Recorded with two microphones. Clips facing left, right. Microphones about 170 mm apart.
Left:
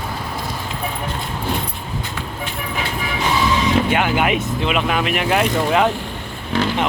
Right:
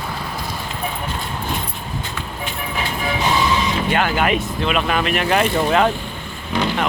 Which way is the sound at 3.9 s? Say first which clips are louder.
Left 1 dB; 15° left (ahead or behind).